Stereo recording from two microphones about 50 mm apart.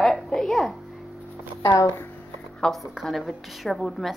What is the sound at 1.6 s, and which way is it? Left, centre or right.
Speech, left.